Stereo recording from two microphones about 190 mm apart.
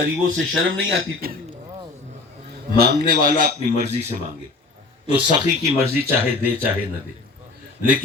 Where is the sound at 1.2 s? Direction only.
50° right (ahead or behind).